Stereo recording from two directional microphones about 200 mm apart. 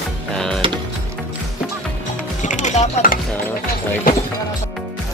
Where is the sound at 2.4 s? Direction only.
40° left (ahead or behind).